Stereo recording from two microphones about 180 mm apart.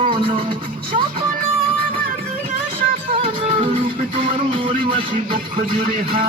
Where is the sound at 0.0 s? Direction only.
30° right (ahead or behind).